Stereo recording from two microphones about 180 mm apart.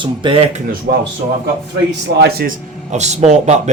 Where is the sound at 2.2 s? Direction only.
60° right (ahead or behind); by 3.7 s 40° right (ahead or behind).